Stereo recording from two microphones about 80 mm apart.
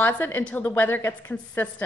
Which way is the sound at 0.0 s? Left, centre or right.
Left.